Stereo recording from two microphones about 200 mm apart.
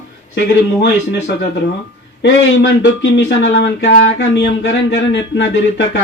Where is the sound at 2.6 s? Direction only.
65° left (ahead or behind).